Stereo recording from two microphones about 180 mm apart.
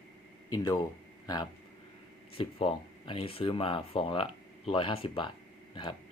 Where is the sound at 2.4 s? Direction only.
30° left (ahead or behind).